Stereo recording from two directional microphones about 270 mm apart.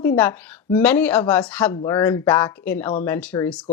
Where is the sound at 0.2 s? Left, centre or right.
Centre.